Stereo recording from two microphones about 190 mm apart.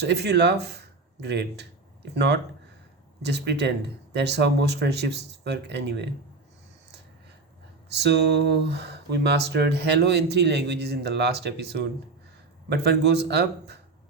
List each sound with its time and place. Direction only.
0.0 s speech: 60° right (ahead or behind)
7.9 s speech: 60° right (ahead or behind)